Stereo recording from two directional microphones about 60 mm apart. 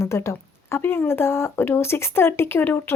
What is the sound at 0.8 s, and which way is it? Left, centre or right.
Speech, left.